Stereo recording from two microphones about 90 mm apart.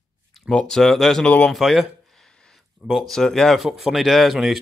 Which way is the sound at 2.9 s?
Centre (ahead or behind).